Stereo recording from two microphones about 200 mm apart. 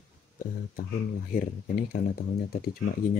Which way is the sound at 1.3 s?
45° left (ahead or behind).